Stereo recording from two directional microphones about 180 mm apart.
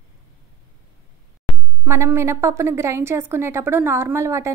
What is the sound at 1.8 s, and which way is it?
A woman's voice, 15° right (ahead or behind).